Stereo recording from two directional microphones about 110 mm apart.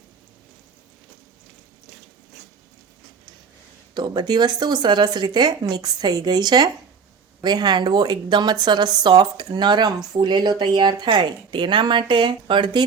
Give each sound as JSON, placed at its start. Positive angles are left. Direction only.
{"t": 3.9, "sound": "speech", "side_deg": -40}